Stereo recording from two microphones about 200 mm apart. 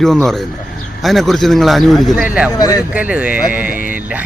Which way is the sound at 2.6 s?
15° left (ahead or behind).